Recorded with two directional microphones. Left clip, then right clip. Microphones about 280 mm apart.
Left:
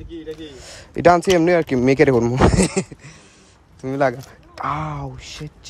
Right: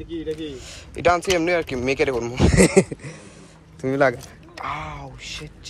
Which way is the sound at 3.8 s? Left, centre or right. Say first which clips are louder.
Even; left.